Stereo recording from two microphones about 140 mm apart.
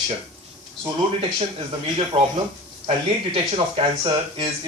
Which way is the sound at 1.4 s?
40° right (ahead or behind).